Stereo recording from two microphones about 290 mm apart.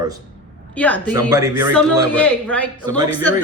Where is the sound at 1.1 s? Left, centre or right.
Centre.